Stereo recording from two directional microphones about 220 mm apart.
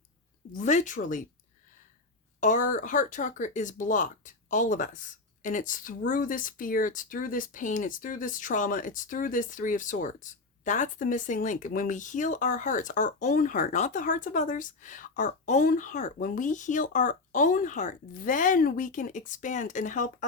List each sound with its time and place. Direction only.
0.5 s speech: 35° left (ahead or behind)
2.4 s speech: 35° left (ahead or behind)